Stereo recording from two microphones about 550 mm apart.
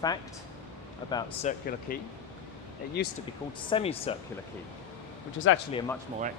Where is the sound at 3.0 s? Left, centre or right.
Centre.